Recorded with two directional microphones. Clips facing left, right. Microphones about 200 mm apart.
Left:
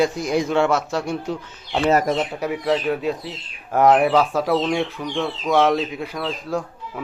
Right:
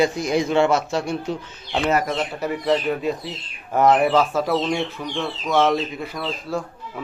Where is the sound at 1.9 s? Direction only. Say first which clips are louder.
Left 4 dB; 35° left (ahead or behind).